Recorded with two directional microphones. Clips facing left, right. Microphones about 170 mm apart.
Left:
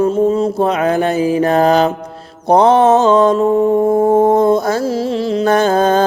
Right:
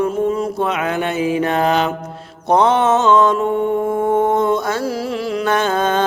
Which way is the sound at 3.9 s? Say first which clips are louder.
Left 4 dB; 35° left (ahead or behind).